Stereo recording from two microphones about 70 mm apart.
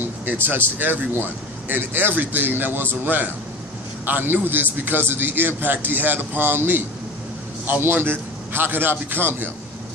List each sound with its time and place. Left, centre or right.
0.0 s a man's voice: right